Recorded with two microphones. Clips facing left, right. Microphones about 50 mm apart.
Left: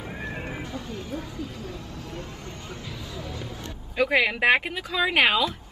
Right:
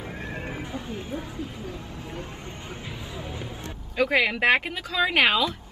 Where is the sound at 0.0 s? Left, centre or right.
Centre.